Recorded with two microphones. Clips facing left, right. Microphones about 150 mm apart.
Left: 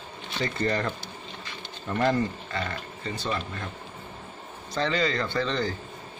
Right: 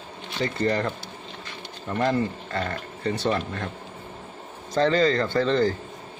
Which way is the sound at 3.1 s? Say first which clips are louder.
Right 6 dB; 65° right (ahead or behind).